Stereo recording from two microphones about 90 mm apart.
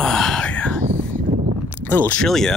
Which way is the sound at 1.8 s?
20° left (ahead or behind).